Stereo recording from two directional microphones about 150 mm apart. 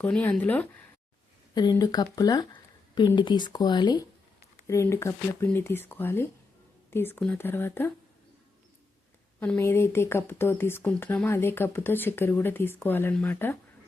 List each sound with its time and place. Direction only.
0.0 s speech: 10° left (ahead or behind)
1.8 s speech: 25° left (ahead or behind)
4.6 s speech: 20° left (ahead or behind)
9.4 s speech: 15° left (ahead or behind)